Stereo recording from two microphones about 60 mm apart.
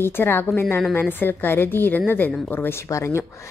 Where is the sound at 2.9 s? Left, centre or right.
Left.